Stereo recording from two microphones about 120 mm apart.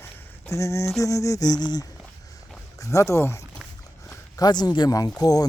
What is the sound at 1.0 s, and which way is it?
Speech, 25° left (ahead or behind).